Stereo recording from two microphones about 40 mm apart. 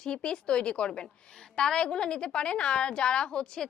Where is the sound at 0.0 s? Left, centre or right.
Left.